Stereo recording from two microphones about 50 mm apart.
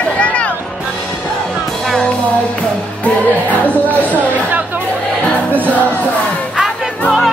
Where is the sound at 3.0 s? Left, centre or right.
Left.